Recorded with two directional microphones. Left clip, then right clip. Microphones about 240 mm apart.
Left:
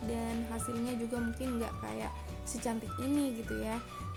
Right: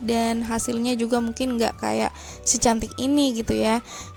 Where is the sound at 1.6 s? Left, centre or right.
Right.